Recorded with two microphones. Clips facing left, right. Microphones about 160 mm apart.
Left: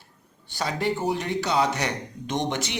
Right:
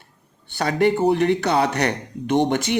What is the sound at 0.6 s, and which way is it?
Speech, 60° right (ahead or behind).